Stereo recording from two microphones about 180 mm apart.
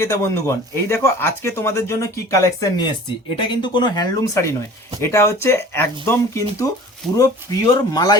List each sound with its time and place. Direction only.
0.0 s speech: 15° left (ahead or behind)